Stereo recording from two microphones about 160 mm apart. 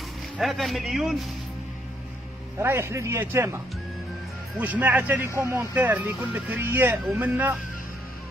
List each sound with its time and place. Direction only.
0.4 s a man's voice: centre (ahead or behind)
2.6 s speech: 15° right (ahead or behind)